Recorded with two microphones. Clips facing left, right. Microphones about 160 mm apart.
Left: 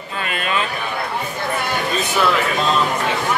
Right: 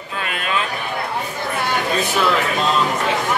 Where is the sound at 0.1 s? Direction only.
Centre (ahead or behind).